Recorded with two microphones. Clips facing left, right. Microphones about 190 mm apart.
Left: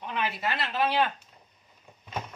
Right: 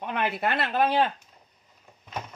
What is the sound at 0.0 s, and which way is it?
Speech, 55° right (ahead or behind).